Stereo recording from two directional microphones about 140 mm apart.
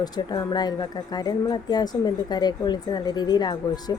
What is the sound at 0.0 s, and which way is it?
Speech, 30° left (ahead or behind).